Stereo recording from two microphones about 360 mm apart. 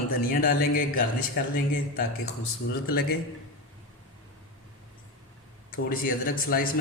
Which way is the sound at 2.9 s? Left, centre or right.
Left.